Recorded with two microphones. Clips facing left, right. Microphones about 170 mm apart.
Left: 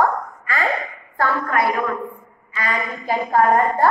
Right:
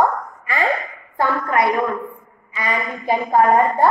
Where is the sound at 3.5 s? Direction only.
20° right (ahead or behind).